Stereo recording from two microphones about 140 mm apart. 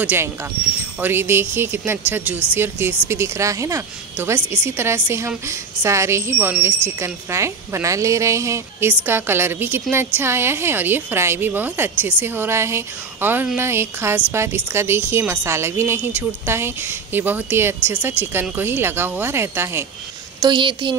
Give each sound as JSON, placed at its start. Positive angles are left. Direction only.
{"t": 0.0, "sound": "a woman's voice", "side_deg": -10}
{"t": 20.3, "sound": "a woman's voice", "side_deg": -35}